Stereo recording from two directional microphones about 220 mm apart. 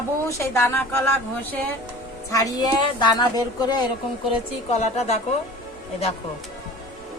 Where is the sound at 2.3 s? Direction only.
15° left (ahead or behind).